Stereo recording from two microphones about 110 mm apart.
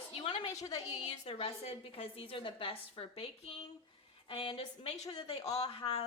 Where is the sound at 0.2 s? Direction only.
55° left (ahead or behind).